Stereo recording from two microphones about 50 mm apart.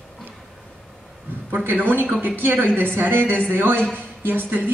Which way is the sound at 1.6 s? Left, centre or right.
Right.